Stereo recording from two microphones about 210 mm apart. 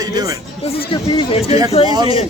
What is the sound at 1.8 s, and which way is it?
Speech, 20° right (ahead or behind).